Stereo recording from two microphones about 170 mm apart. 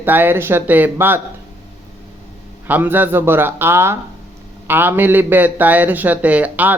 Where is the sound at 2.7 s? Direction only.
10° right (ahead or behind).